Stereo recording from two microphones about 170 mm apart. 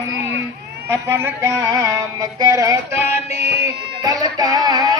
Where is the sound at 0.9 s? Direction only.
15° right (ahead or behind).